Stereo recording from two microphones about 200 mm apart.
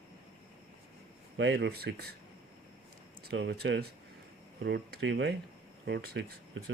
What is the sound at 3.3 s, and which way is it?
Speech, 60° right (ahead or behind).